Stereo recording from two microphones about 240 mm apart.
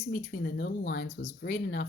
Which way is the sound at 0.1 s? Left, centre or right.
Left.